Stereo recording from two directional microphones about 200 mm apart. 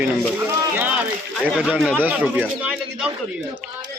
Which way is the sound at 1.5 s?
5° right (ahead or behind).